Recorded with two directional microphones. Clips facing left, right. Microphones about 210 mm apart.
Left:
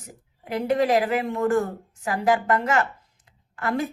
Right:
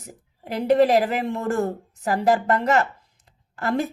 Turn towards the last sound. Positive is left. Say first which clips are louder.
# right 2 dB
turn(degrees=-40)  # may be behind; listen again after turning